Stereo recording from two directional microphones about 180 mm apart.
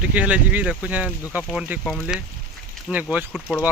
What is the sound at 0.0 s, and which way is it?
Speech, 10° right (ahead or behind).